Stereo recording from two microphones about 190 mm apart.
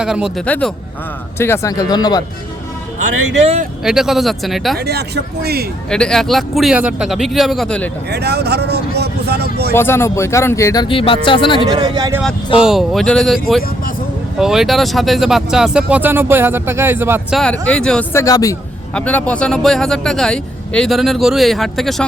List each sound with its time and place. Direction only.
0.0 s speech: 5° right (ahead or behind)
0.4 s speech: 5° left (ahead or behind)
3.4 s speech: 35° right (ahead or behind)
3.8 s speech: centre (ahead or behind)
4.8 s speech: 55° right (ahead or behind)
5.9 s speech: 5° left (ahead or behind)
8.1 s speech: 60° right (ahead or behind)
9.7 s speech: 15° left (ahead or behind)
10.8 s speech: 30° left (ahead or behind)
11.6 s speech: 20° right (ahead or behind)
12.5 s speech: centre (ahead or behind)
17.3 s speech: 5° left (ahead or behind)
18.9 s speech: 5° left (ahead or behind)